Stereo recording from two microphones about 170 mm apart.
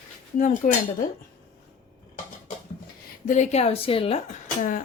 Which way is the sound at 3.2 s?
45° left (ahead or behind).